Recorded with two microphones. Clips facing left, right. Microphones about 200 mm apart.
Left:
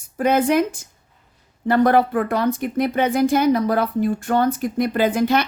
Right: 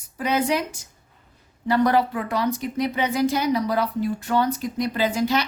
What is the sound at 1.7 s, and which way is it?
A woman's voice, 55° left (ahead or behind).